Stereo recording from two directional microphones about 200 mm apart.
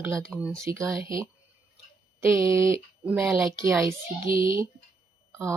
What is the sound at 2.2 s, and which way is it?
Speech, 15° right (ahead or behind).